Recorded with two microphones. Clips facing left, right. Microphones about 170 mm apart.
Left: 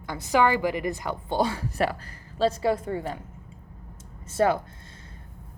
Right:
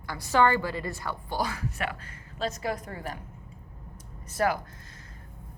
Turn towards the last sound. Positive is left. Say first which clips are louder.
# left 4 dB
turn(degrees=25)  # may be behind; listen again after turning